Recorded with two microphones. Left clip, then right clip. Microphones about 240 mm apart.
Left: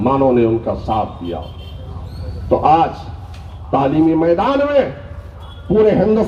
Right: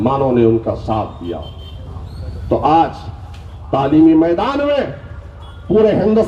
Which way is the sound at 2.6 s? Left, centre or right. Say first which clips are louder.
Even; right.